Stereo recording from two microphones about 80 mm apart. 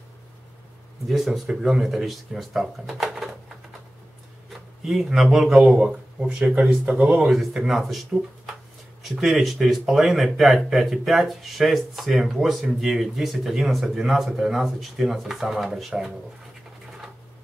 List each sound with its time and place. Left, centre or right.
1.0 s speech: centre
4.5 s a man's voice: centre